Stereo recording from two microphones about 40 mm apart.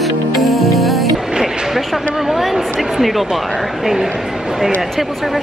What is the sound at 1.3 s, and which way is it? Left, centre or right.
Music, centre.